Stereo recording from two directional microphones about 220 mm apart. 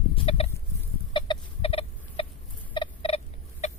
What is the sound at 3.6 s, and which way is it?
Chicken, 30° left (ahead or behind).